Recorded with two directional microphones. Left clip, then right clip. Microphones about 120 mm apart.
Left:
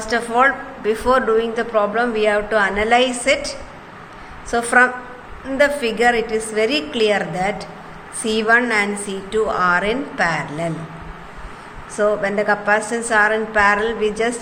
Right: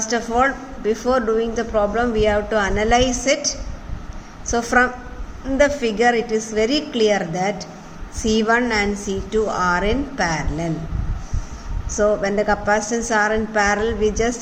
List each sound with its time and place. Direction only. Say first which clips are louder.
0.1 s a woman's voice: left 4 dB; 50° right (ahead or behind)
4.5 s a woman's voice: left 3 dB; 65° right (ahead or behind)
5.5 s a woman's voice: left 1 dB; 50° right (ahead or behind)
11.9 s a woman's voice: even; 60° right (ahead or behind)